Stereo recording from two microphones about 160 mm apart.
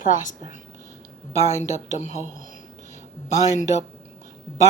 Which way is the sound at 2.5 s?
50° left (ahead or behind).